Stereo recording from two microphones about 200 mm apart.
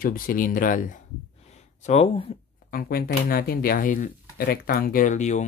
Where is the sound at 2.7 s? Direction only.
50° left (ahead or behind).